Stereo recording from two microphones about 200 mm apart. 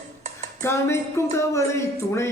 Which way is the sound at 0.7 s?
15° left (ahead or behind).